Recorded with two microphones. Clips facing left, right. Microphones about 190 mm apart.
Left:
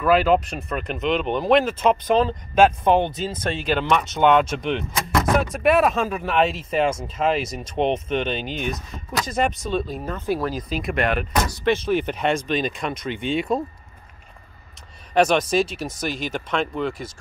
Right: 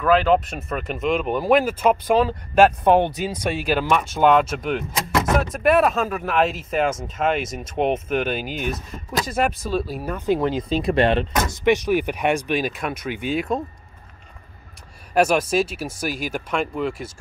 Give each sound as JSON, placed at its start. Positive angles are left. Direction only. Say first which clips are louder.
{"t": 0.0, "sound": "speech", "louder": "even", "side_deg": 5}
{"t": 10.7, "sound": "speech", "louder": "right 5 dB", "side_deg": -30}
{"t": 11.6, "sound": "speech", "louder": "right 3 dB", "side_deg": -15}
{"t": 15.1, "sound": "speech", "louder": "even", "side_deg": -5}